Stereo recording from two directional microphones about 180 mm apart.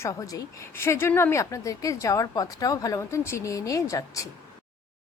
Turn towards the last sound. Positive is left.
turn(degrees=20)  # may be behind; listen again after turning